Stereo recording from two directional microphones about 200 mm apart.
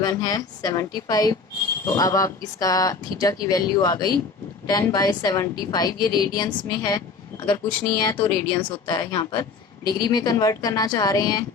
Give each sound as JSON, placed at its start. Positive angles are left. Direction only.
{"t": 0.0, "sound": "a woman's voice", "side_deg": 20}